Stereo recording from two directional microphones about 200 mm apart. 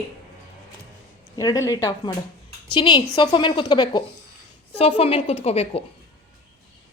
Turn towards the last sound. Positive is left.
turn(degrees=30)  # may be behind; listen again after turning